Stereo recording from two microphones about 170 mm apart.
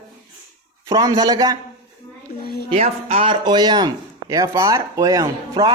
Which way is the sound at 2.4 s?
65° left (ahead or behind).